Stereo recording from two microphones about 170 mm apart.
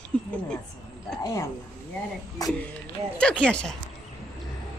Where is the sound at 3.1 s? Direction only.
5° left (ahead or behind).